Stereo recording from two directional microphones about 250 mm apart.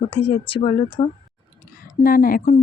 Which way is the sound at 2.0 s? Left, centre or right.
Left.